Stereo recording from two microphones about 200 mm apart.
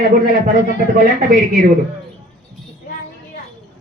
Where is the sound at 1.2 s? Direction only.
45° right (ahead or behind).